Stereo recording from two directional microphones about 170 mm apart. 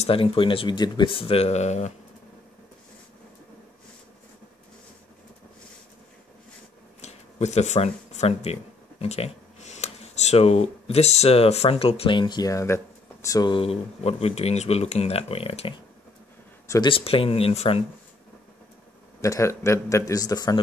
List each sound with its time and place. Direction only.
0.0 s speech: 35° left (ahead or behind)
7.0 s speech: 40° left (ahead or behind)
16.6 s speech: 20° left (ahead or behind)
16.9 s speech: 35° left (ahead or behind)
19.2 s a man's voice: 15° left (ahead or behind)